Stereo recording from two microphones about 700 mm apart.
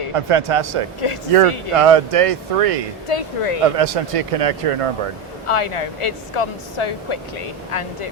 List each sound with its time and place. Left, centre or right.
0.1 s speech: right
3.1 s speech: left
3.8 s speech: right
5.5 s speech: left